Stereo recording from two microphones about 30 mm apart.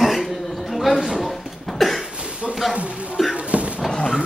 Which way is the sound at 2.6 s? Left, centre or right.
Centre.